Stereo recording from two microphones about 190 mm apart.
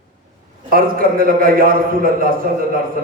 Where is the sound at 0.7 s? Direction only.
50° right (ahead or behind).